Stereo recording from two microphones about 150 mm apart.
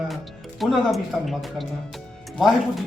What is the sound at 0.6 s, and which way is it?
Speech, centre (ahead or behind).